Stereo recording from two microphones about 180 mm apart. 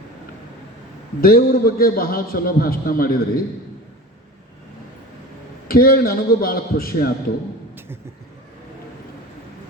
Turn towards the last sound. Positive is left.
turn(degrees=-15)  # may be behind; listen again after turning